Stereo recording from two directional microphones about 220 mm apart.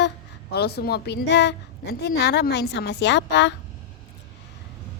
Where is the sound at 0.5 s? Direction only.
45° left (ahead or behind).